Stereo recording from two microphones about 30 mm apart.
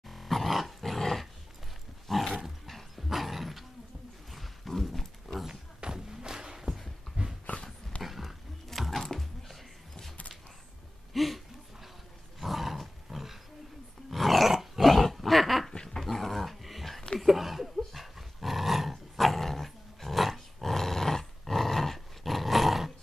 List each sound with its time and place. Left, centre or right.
0.1 s dog: centre
4.3 s a sound: centre
5.9 s a sound: centre
7.1 s dog: centre
7.5 s dog: left
8.0 s a sound: centre
8.6 s music: centre
11.1 s a sound: centre
12.4 s roar: centre
14.1 s dog: centre
15.7 s dog: left
16.0 s dog: centre